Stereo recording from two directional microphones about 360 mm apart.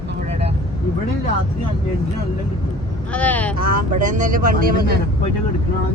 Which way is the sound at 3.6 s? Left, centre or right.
Right.